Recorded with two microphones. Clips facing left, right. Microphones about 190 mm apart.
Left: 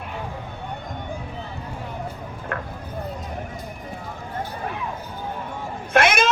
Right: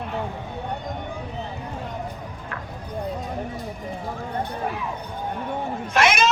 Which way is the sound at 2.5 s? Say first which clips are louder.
Left 7 dB; 55° left (ahead or behind).